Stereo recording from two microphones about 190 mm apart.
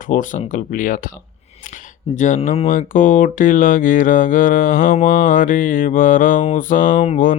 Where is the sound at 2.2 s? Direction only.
40° left (ahead or behind).